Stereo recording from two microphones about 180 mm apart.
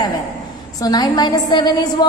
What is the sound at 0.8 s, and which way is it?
A woman's voice, 20° left (ahead or behind).